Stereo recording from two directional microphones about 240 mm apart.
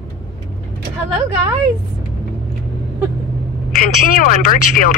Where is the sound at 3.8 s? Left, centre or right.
Left.